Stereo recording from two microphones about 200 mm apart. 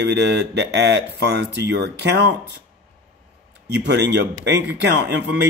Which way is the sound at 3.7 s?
60° right (ahead or behind).